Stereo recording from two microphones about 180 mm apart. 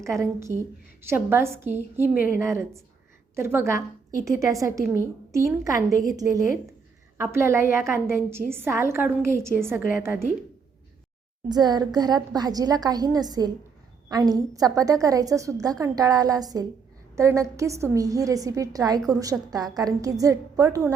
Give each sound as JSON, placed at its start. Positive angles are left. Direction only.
{"t": 0.0, "sound": "a woman's voice", "side_deg": -15}
{"t": 11.4, "sound": "a woman's voice", "side_deg": -20}